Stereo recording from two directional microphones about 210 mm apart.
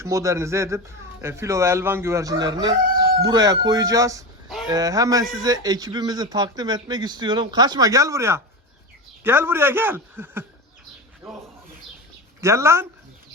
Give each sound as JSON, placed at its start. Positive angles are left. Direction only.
{"t": 0.0, "sound": "speech", "side_deg": -15}
{"t": 12.4, "sound": "speech", "side_deg": -15}